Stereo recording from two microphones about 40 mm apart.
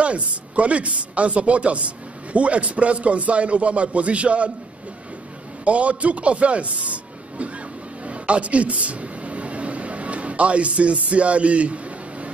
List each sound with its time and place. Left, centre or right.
0.0 s speech: right
5.7 s speech: right
8.0 s a sound: right